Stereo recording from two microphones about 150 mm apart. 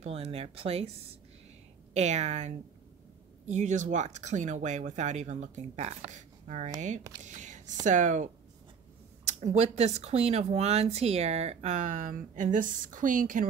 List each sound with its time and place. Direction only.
0.0 s speech: 45° right (ahead or behind)
2.0 s speech: 50° right (ahead or behind)
7.2 s a sound: 55° right (ahead or behind)
7.8 s speech: 55° right (ahead or behind)
9.3 s speech: 50° right (ahead or behind)